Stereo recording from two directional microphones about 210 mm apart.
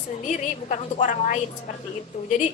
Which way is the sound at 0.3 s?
35° left (ahead or behind).